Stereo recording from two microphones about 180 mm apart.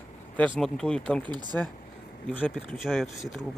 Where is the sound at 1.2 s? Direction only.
25° right (ahead or behind).